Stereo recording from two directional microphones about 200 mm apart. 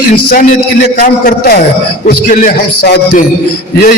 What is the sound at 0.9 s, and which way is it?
A man's voice, 45° left (ahead or behind).